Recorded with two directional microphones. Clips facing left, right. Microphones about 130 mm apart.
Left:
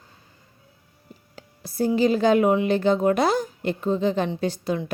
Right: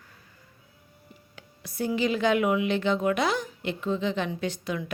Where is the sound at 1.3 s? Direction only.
35° left (ahead or behind).